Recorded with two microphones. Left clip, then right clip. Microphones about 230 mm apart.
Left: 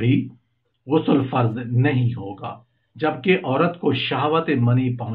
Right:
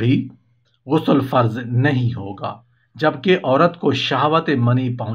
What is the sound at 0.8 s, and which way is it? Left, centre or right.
Speech, right.